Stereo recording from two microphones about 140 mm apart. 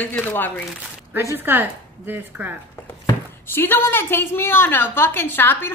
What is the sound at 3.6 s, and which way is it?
A woman's voice, 15° left (ahead or behind).